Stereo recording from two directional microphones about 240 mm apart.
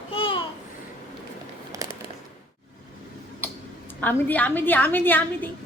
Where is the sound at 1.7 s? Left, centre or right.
Centre.